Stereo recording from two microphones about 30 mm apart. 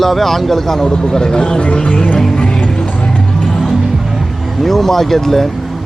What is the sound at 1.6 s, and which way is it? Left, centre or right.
Music, left.